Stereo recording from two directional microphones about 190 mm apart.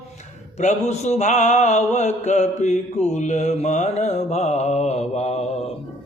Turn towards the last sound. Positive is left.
turn(degrees=35)  # may be behind; listen again after turning